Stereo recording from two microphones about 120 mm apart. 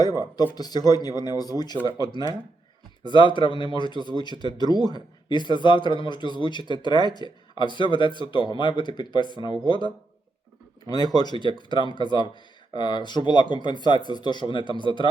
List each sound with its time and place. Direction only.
0.5 s speech: 35° left (ahead or behind)
3.0 s speech: 40° left (ahead or behind)